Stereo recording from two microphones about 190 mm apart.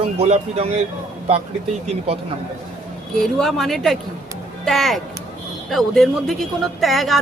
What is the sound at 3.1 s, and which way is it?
Speech, centre (ahead or behind).